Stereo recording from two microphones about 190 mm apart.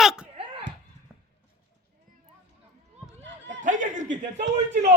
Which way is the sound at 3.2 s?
70° right (ahead or behind).